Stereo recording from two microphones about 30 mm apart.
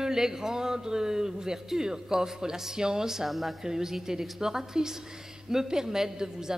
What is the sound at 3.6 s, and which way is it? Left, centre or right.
A woman's voice, centre.